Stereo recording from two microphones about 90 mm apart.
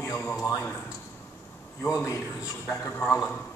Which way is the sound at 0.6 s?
25° left (ahead or behind).